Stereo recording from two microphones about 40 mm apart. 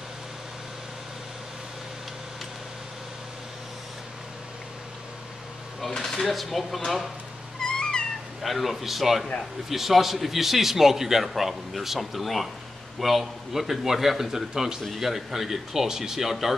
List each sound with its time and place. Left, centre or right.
5.9 s a man's voice: centre
7.6 s cat: centre
8.4 s a man's voice: centre